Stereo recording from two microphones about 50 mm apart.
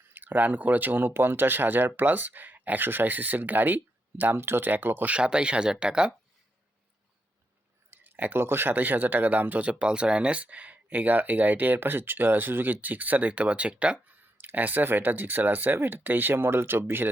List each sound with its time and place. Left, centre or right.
0.1 s speech: right
4.4 s speech: right
5.1 s speech: centre
7.9 s speech: right
14.1 s speech: right